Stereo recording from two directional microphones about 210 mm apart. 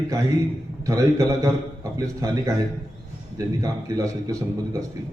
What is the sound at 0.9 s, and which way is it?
Speech, 15° right (ahead or behind).